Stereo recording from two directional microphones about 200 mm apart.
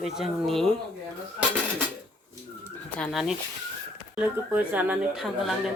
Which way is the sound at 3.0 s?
Centre (ahead or behind).